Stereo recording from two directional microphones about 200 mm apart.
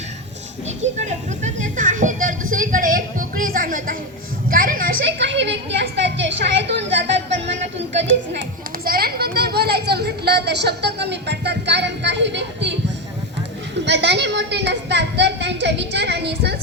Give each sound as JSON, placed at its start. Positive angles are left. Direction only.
{"t": 0.8, "sound": "music", "side_deg": -35}
{"t": 4.4, "sound": "a sound", "side_deg": -45}
{"t": 5.0, "sound": "a woman's voice", "side_deg": -60}
{"t": 7.9, "sound": "children playing", "side_deg": -65}
{"t": 13.7, "sound": "a woman's voice", "side_deg": -60}